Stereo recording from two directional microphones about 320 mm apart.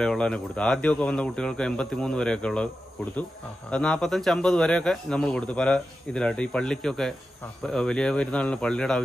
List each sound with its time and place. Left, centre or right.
0.0 s speech: centre
3.7 s speech: centre